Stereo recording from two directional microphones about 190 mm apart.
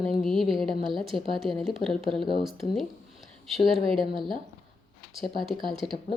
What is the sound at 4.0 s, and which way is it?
Speech, 25° right (ahead or behind).